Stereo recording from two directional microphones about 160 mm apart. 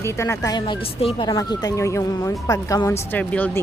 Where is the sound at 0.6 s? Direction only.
35° left (ahead or behind); by 2.3 s 20° left (ahead or behind).